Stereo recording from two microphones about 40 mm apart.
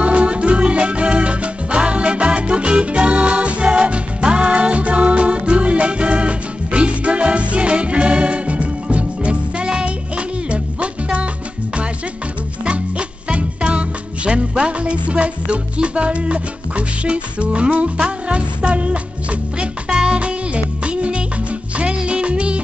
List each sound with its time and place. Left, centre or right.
0.0 s music: right
12.6 s music: right
19.9 s music: centre
20.2 s music: right